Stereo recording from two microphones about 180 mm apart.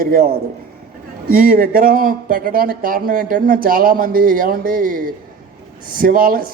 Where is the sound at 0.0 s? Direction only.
55° right (ahead or behind).